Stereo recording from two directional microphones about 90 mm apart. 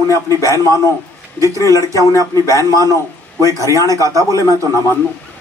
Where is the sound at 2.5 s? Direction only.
40° right (ahead or behind).